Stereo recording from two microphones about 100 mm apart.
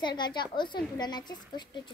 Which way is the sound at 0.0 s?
45° left (ahead or behind).